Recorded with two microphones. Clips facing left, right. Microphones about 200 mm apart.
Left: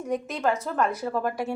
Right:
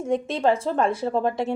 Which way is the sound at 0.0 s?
30° right (ahead or behind).